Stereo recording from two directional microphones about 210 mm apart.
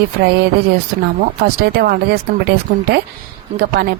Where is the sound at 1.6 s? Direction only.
50° right (ahead or behind).